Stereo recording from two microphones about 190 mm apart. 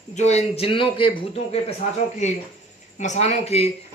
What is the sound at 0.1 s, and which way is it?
Speech, 35° left (ahead or behind).